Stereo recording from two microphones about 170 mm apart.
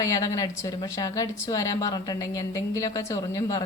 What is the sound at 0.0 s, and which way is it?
A woman's voice, 20° left (ahead or behind).